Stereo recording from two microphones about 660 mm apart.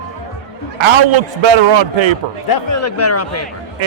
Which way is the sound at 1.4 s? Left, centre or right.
Right.